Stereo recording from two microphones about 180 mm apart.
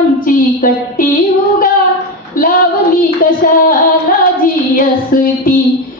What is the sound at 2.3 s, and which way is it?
Female singing, 50° left (ahead or behind).